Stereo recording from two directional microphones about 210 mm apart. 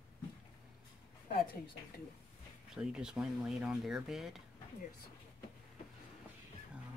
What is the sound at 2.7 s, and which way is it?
Speech, 5° right (ahead or behind).